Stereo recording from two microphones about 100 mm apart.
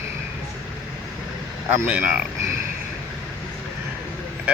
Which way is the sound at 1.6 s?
20° right (ahead or behind).